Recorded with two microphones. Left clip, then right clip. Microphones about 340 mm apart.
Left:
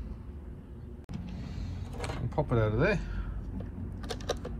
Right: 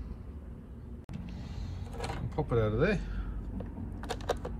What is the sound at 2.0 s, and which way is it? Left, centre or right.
Speech, centre.